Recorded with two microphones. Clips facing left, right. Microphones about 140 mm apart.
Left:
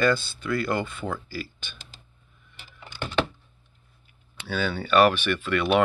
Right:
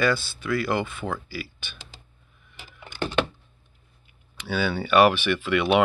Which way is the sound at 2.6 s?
15° right (ahead or behind).